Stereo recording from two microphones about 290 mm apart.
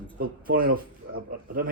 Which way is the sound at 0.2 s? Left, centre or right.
Right.